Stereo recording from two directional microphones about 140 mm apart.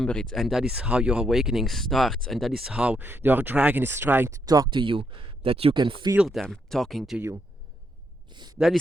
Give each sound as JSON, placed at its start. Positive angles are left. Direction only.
{"t": 0.0, "sound": "speech", "side_deg": 5}
{"t": 4.4, "sound": "speech", "side_deg": -25}
{"t": 6.1, "sound": "speech", "side_deg": 0}
{"t": 8.3, "sound": "a sound", "side_deg": -30}
{"t": 8.5, "sound": "speech", "side_deg": -5}